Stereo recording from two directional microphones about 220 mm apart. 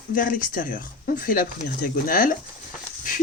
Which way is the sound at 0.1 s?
40° left (ahead or behind).